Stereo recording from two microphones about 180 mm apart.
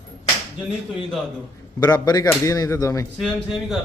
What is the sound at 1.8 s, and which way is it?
Speech, 20° left (ahead or behind).